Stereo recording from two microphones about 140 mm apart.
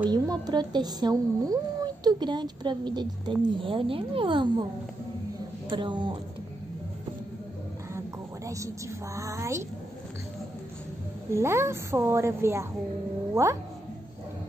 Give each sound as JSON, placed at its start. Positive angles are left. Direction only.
{"t": 0.0, "sound": "a woman's voice", "side_deg": -30}
{"t": 5.7, "sound": "speech", "side_deg": -35}
{"t": 8.5, "sound": "a woman's voice", "side_deg": -20}
{"t": 11.3, "sound": "a woman's voice", "side_deg": -20}